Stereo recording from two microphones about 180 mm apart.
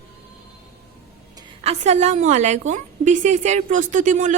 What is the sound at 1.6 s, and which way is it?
A woman's voice, 35° right (ahead or behind).